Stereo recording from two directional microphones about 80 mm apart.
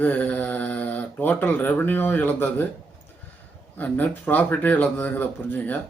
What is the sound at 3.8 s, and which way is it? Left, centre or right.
Speech, left.